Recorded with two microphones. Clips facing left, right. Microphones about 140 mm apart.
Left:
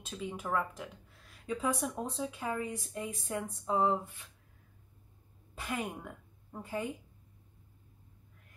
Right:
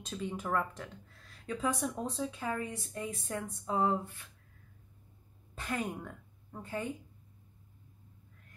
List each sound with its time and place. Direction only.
0.0 s speech: 5° left (ahead or behind)
5.5 s a woman's voice: 5° left (ahead or behind)